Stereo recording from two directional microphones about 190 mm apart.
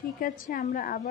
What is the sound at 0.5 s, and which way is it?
Speech, 45° left (ahead or behind).